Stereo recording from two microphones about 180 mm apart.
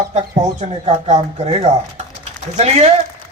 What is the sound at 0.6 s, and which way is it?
A man's voice, 40° right (ahead or behind).